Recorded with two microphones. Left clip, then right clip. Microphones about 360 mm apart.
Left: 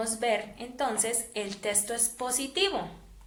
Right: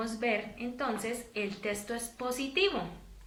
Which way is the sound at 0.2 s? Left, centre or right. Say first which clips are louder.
Left 3 dB; centre.